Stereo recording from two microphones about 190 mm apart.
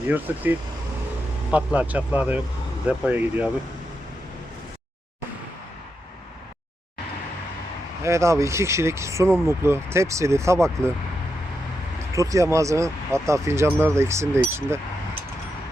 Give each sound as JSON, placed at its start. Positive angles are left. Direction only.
{"t": 0.3, "sound": "speech", "side_deg": -10}
{"t": 1.5, "sound": "speech", "side_deg": -5}
{"t": 8.0, "sound": "speech", "side_deg": -15}
{"t": 12.1, "sound": "speech", "side_deg": -15}